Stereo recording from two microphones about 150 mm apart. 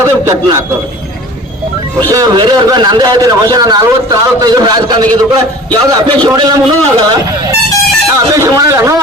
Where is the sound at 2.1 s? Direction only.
25° right (ahead or behind).